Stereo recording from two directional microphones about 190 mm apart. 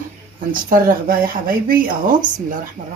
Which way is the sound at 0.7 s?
50° right (ahead or behind).